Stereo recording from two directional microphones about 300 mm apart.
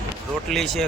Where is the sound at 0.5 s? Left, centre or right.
Centre.